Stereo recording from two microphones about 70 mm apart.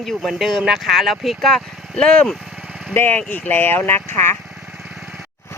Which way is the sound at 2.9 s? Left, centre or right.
Left.